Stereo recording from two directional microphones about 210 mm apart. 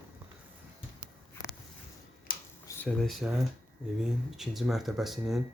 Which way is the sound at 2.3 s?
45° left (ahead or behind).